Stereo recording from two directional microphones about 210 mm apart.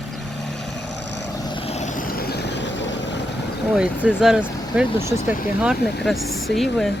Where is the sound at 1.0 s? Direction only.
55° left (ahead or behind).